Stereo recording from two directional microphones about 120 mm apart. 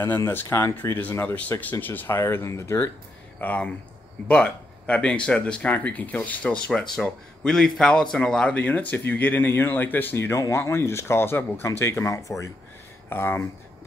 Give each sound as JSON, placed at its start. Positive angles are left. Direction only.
{"t": 0.0, "sound": "speech", "side_deg": 20}